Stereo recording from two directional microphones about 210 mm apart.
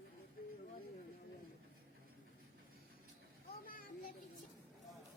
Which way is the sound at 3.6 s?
40° left (ahead or behind).